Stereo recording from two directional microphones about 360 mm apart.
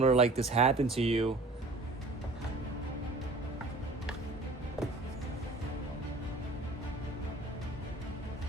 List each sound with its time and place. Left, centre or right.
0.0 s speech: centre